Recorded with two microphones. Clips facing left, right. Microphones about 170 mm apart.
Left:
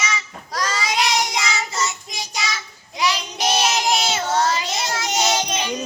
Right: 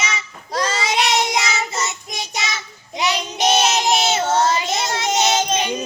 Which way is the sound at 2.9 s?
25° right (ahead or behind).